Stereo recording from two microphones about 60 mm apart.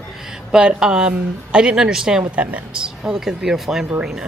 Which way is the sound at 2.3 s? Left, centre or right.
Right.